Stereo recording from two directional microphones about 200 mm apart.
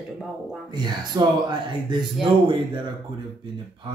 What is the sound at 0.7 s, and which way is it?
Speech, 20° right (ahead or behind).